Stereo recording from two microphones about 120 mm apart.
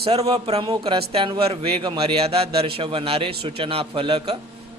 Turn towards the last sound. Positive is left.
turn(degrees=-50)  # may be behind; listen again after turning